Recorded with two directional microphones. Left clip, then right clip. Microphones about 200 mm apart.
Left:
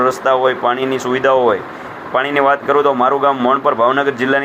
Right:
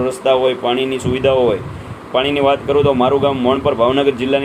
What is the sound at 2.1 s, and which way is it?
Speech, 20° left (ahead or behind).